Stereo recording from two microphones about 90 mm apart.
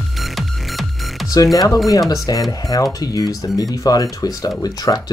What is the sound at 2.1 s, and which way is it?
Speech, 40° left (ahead or behind).